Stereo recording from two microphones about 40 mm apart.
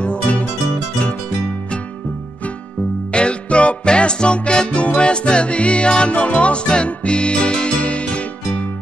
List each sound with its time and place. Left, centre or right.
0.0 s music: left
3.1 s music: left